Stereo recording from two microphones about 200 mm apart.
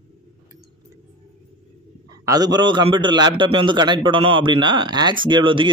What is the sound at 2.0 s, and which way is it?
A man's voice, 20° right (ahead or behind).